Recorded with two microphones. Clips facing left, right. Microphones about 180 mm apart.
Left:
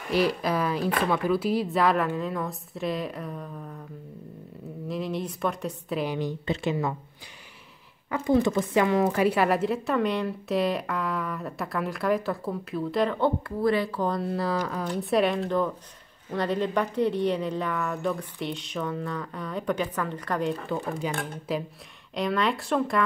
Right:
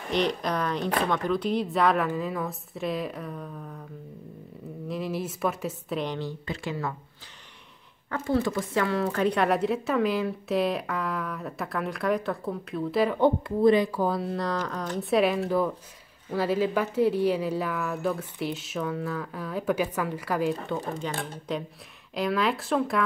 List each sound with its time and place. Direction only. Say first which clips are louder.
0.1 s a woman's voice: left 2 dB; 5° left (ahead or behind)
4.8 s a woman's voice: even; centre (ahead or behind)
6.4 s speech: left 5 dB; 25° left (ahead or behind)
8.1 s a woman's voice: left 3 dB; 15° left (ahead or behind); by 13.3 s 10° right (ahead or behind)
13.6 s speech: right 5 dB; 20° right (ahead or behind)
14.0 s a woman's voice: even; centre (ahead or behind)